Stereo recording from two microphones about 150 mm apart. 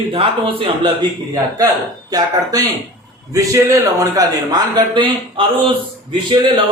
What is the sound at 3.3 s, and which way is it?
A man's voice, 20° right (ahead or behind).